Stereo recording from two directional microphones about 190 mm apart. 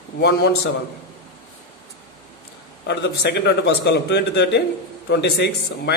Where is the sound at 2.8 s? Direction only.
60° left (ahead or behind).